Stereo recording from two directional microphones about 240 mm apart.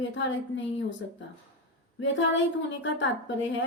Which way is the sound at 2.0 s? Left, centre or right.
Left.